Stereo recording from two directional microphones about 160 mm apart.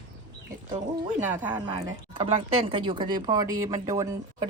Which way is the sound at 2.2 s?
40° right (ahead or behind).